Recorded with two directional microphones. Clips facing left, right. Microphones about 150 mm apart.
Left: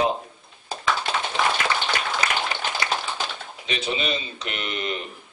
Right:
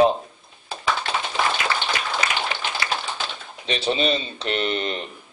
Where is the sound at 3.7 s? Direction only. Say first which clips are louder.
Right 5 dB; 35° right (ahead or behind).